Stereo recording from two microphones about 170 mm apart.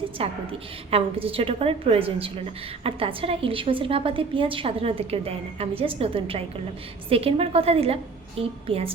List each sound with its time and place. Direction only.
0.2 s a woman's voice: 35° right (ahead or behind)